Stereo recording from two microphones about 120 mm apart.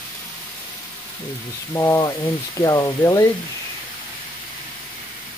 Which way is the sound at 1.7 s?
25° left (ahead or behind).